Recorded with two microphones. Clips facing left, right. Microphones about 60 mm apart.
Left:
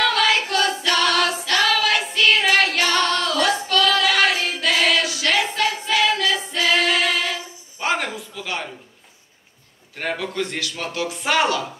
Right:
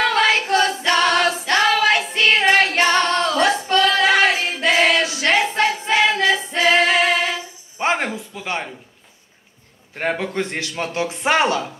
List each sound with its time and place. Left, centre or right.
0.0 s singing: right
2.5 s female singing: right
7.8 s a sound: right
9.9 s speech: right